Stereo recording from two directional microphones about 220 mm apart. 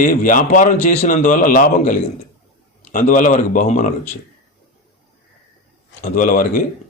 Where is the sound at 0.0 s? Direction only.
40° left (ahead or behind).